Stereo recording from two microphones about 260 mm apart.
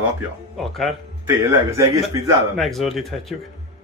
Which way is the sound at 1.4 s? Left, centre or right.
Centre.